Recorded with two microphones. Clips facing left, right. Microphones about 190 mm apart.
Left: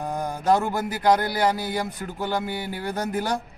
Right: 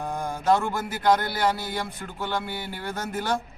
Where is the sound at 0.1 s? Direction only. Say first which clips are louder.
Left 1 dB; 40° left (ahead or behind).